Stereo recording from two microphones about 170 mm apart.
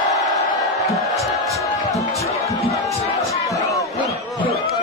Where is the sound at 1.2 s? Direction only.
20° left (ahead or behind).